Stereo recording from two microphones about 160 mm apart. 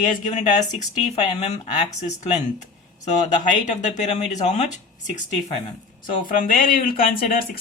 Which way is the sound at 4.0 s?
45° left (ahead or behind).